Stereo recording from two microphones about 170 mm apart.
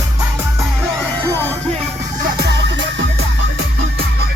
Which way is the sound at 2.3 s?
75° right (ahead or behind).